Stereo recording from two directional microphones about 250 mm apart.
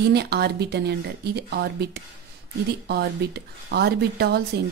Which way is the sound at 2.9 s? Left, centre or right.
Right.